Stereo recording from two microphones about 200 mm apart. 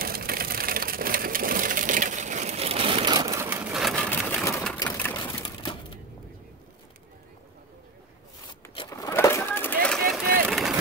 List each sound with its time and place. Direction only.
0.0 s crushing: 50° right (ahead or behind); by 3.6 s 15° right (ahead or behind)
3.7 s a sound: centre (ahead or behind)
4.8 s sewing machine: 10° left (ahead or behind)
5.1 s typewriter: 20° left (ahead or behind)
8.7 s vehicle: 15° left (ahead or behind)
9.8 s run: 5° left (ahead or behind)